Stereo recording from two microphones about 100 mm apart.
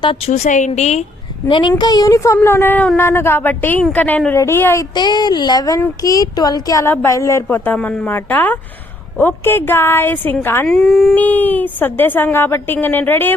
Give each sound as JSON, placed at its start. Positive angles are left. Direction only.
{"t": 1.5, "sound": "speech", "side_deg": 55}
{"t": 1.8, "sound": "a woman's voice", "side_deg": 40}
{"t": 4.9, "sound": "speech", "side_deg": 45}
{"t": 6.8, "sound": "a woman's voice", "side_deg": 25}
{"t": 7.5, "sound": "a woman's voice", "side_deg": 20}
{"t": 10.7, "sound": "speech", "side_deg": 0}
{"t": 11.1, "sound": "a woman's voice", "side_deg": 15}